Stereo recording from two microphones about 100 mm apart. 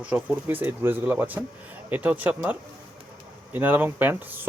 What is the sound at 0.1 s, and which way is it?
Speech, 15° right (ahead or behind).